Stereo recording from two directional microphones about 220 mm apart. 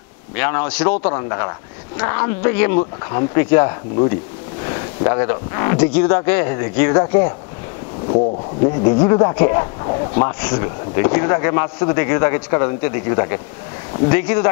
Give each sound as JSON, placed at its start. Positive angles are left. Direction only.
{"t": 0.4, "sound": "speech", "side_deg": 15}
{"t": 1.0, "sound": "a man's voice", "side_deg": 20}
{"t": 8.6, "sound": "a man's voice", "side_deg": 25}